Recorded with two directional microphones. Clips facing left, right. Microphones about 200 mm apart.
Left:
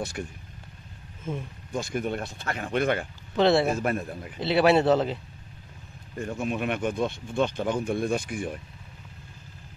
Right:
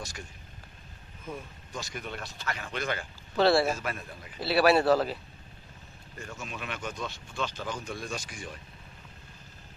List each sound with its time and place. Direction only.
0.0 s speech: 60° left (ahead or behind)
1.7 s speech: 50° left (ahead or behind)
3.3 s speech: 20° left (ahead or behind)
3.7 s speech: 50° left (ahead or behind)
4.4 s speech: 20° left (ahead or behind)
6.3 s speech: 55° left (ahead or behind)